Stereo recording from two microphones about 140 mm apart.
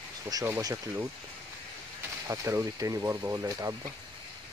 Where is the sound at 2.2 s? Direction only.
20° right (ahead or behind).